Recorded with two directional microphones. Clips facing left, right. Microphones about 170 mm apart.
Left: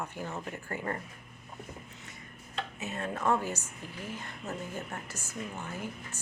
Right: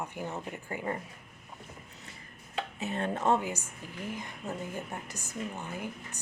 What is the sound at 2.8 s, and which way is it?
Speech, 30° right (ahead or behind).